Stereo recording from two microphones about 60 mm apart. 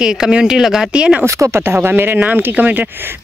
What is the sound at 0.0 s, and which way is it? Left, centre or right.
Speech, centre.